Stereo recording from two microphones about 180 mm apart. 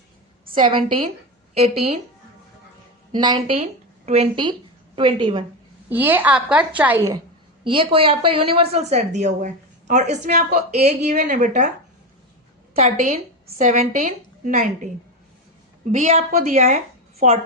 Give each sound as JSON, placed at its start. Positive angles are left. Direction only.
{"t": 0.5, "sound": "a woman's voice", "side_deg": -30}
{"t": 3.1, "sound": "a woman's voice", "side_deg": -25}
{"t": 5.9, "sound": "a woman's voice", "side_deg": -10}
{"t": 7.6, "sound": "a woman's voice", "side_deg": -30}
{"t": 12.7, "sound": "a woman's voice", "side_deg": -35}
{"t": 15.9, "sound": "speech", "side_deg": -40}